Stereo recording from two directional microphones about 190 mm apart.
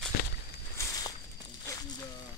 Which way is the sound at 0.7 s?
20° left (ahead or behind).